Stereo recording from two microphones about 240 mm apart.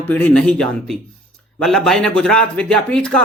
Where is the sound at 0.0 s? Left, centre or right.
Centre.